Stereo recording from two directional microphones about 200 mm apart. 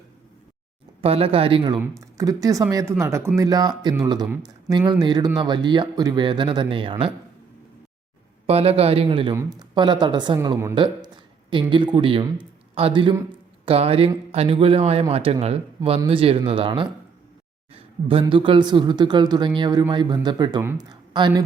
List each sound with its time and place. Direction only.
1.0 s speech: 30° right (ahead or behind)
8.4 s speech: 30° right (ahead or behind)